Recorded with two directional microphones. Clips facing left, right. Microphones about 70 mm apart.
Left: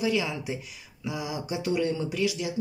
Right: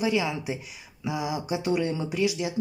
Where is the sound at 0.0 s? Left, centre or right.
Right.